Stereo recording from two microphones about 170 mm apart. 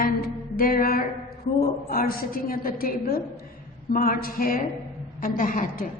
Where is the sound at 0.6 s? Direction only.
55° left (ahead or behind).